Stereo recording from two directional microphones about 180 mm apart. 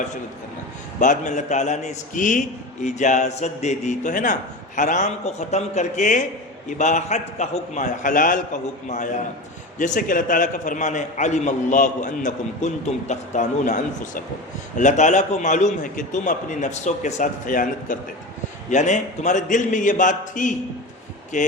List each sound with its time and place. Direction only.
0.9 s a man's voice: 45° left (ahead or behind)
9.7 s a man's voice: 45° left (ahead or behind)